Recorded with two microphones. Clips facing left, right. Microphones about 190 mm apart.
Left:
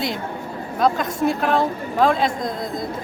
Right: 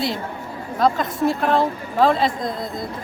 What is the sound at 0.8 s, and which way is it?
A woman's voice, centre (ahead or behind).